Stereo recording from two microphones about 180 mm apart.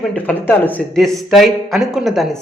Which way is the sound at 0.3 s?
10° left (ahead or behind).